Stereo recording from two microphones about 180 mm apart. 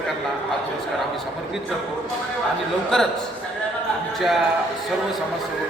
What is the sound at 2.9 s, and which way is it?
Speech, 5° left (ahead or behind).